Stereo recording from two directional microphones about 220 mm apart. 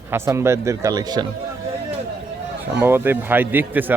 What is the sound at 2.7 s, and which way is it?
Speech, 10° right (ahead or behind).